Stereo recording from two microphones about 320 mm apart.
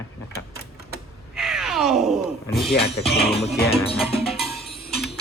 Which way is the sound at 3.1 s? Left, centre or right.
Left.